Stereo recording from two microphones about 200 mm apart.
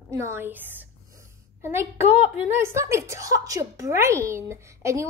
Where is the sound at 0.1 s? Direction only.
15° right (ahead or behind).